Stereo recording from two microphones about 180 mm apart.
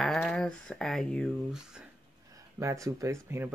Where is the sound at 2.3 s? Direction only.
15° right (ahead or behind).